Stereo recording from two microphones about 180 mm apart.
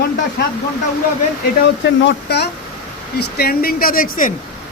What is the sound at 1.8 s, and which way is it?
A man's voice, 70° left (ahead or behind).